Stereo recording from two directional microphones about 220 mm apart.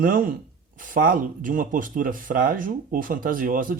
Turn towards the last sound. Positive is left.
turn(degrees=-40)  # may be behind; listen again after turning